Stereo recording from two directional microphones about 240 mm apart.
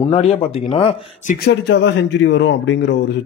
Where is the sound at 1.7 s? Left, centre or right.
Left.